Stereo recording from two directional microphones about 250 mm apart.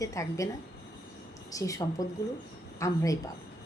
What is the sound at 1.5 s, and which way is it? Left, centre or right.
A woman's voice, centre.